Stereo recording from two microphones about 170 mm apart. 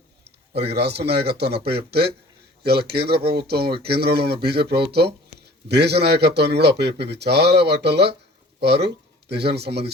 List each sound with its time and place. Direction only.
0.3 s speech: 75° right (ahead or behind)